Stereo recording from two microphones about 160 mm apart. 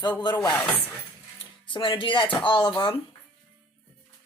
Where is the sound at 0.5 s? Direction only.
10° left (ahead or behind).